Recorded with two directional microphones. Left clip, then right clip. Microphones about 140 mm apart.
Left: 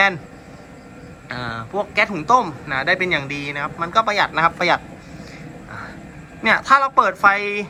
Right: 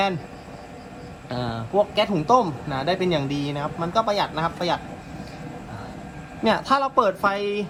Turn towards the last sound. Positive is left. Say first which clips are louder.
# left 7 dB
turn(degrees=-35)  # may be behind; listen again after turning